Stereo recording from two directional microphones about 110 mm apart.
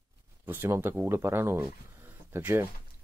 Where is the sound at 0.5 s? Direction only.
20° right (ahead or behind).